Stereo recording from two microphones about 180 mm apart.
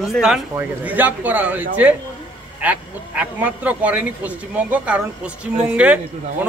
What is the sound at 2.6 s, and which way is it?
Speech, 10° right (ahead or behind).